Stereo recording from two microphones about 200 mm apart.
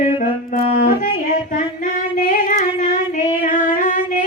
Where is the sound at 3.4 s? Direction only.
40° left (ahead or behind).